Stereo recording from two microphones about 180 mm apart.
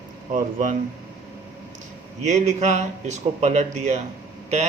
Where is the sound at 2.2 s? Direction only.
40° right (ahead or behind).